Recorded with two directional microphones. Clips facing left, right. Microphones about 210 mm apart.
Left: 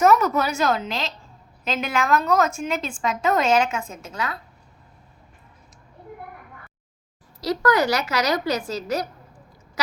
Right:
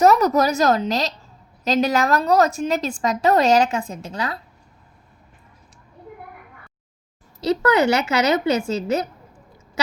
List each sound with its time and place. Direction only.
0.0 s a woman's voice: 35° right (ahead or behind)
7.4 s a woman's voice: 25° right (ahead or behind)
9.8 s a sound: 25° right (ahead or behind)